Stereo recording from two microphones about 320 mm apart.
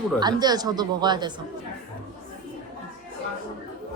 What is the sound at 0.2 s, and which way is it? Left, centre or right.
Speech, centre.